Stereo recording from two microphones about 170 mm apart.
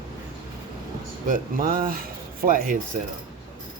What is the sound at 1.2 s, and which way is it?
Speech, 55° right (ahead or behind).